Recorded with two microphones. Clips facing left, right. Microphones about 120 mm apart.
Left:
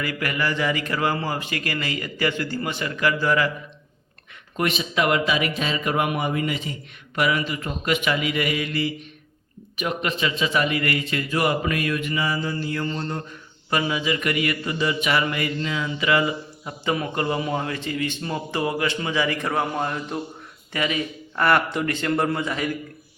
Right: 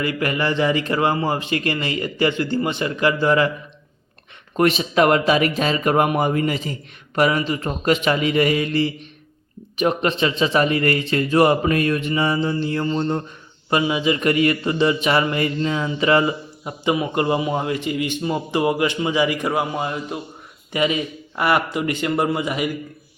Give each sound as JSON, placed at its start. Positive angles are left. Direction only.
{"t": 0.0, "sound": "a man's voice", "side_deg": -25}
{"t": 4.5, "sound": "a man's voice", "side_deg": -35}
{"t": 16.6, "sound": "a man's voice", "side_deg": -15}
{"t": 20.7, "sound": "speech", "side_deg": -20}
{"t": 21.4, "sound": "a man's voice", "side_deg": -10}